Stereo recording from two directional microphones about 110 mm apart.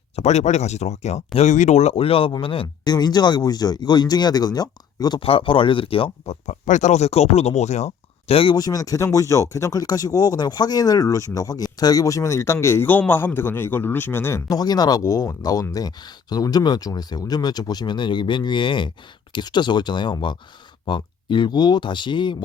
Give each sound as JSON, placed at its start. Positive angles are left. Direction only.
{"t": 0.2, "sound": "speech", "side_deg": 90}
{"t": 5.2, "sound": "speech", "side_deg": 55}
{"t": 8.5, "sound": "speech", "side_deg": 35}
{"t": 14.5, "sound": "speech", "side_deg": 35}